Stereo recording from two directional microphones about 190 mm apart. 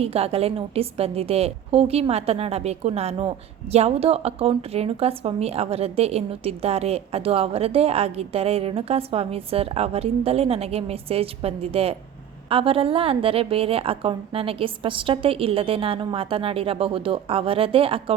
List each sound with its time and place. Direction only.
0.0 s a woman's voice: 30° right (ahead or behind)